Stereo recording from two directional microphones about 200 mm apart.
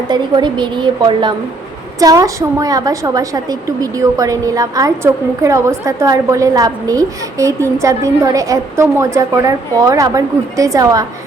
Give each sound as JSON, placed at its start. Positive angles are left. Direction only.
{"t": 0.1, "sound": "a woman's voice", "side_deg": -20}